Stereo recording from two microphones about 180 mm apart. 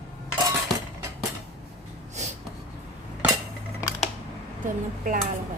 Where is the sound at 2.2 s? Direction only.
40° right (ahead or behind).